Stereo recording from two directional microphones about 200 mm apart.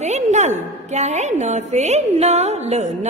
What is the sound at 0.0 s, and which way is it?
A woman's voice, 35° right (ahead or behind).